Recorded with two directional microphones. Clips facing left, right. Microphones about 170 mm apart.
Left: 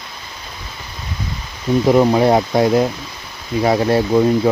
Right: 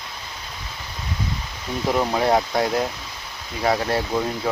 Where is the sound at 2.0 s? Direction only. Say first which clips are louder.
Left 3 dB; 25° left (ahead or behind).